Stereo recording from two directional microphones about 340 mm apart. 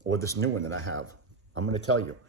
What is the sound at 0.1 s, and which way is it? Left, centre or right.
Speech, centre.